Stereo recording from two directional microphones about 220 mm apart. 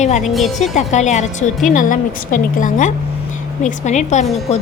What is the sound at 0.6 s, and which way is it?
A woman's voice, 30° left (ahead or behind).